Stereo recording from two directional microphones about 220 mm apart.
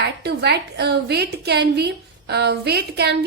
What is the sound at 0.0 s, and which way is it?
A woman's voice, 50° right (ahead or behind).